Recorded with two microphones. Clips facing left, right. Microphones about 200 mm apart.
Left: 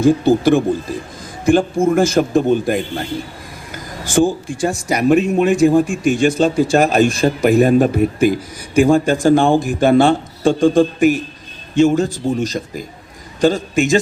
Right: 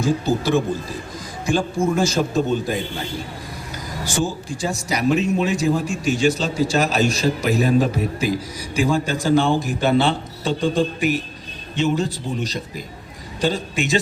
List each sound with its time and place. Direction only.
0.0 s speech: 55° left (ahead or behind)
4.0 s speech: 55° left (ahead or behind)